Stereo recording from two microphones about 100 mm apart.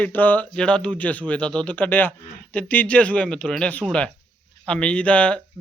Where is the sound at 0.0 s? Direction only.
15° left (ahead or behind).